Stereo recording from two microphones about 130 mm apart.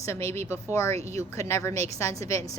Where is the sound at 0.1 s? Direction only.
20° left (ahead or behind).